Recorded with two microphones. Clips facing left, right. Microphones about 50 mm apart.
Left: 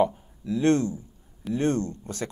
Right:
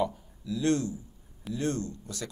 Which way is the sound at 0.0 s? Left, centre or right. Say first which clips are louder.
Left 7 dB; left.